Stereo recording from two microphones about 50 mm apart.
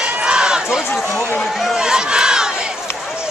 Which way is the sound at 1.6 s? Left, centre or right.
Centre.